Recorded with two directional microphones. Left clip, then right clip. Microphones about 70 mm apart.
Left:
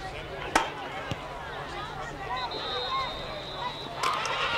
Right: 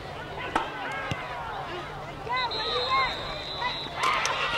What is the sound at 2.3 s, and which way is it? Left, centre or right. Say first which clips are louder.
Boat: right 5 dB; right.